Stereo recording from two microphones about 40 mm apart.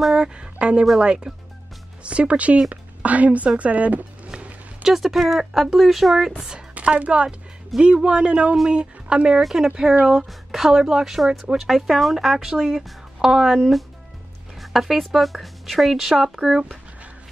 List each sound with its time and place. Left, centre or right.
0.1 s speech: right
2.0 s a woman's voice: right
4.8 s speech: centre
6.7 s speech: right
9.4 s speech: centre
14.6 s speech: centre